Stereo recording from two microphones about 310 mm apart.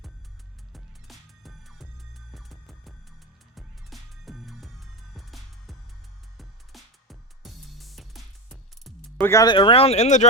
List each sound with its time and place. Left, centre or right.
0.7 s music: centre; by 10.2 s left